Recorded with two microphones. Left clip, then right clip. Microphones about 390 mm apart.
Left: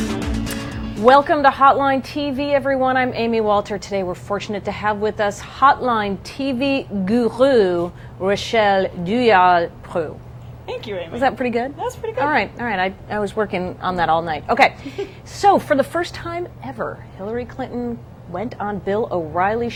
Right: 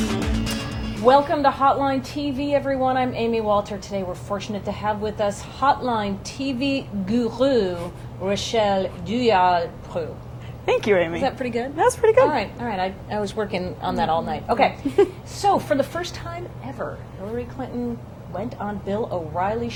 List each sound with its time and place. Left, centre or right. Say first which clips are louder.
0.0 s music: left 1 dB; centre
1.0 s a woman's voice: left 4 dB; left
10.7 s speech: right 9 dB; right
11.2 s a woman's voice: left 5 dB; left
11.8 s speech: right 9 dB; right
12.2 s a woman's voice: left 1 dB; left
18.3 s a woman's voice: left 4 dB; left